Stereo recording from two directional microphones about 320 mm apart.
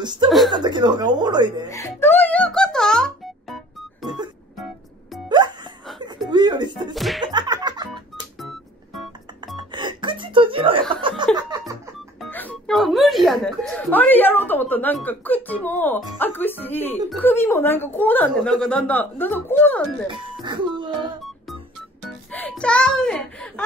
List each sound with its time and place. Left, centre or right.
0.5 s speech: centre
1.7 s music: centre
6.0 s a sound: centre
6.9 s slap: centre
7.3 s music: centre
8.4 s music: centre
9.6 s chuckle: centre
11.3 s music: centre
12.2 s music: centre
16.2 s speech: centre
20.4 s music: centre
22.0 s music: centre